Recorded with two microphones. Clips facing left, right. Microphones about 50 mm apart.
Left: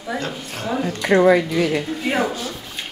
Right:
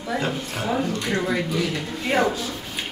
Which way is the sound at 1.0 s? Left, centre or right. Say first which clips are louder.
Left 9 dB; left.